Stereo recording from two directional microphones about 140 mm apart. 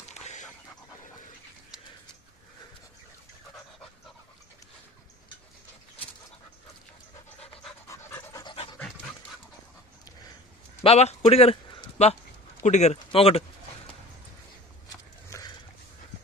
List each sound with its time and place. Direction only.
0.1 s pant: 55° left (ahead or behind)
7.9 s pant: 15° left (ahead or behind)
10.8 s a man's voice: 50° left (ahead or behind)
15.2 s a sound: 20° left (ahead or behind)